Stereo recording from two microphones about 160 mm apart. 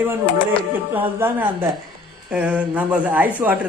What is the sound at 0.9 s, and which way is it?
Speech, 10° right (ahead or behind).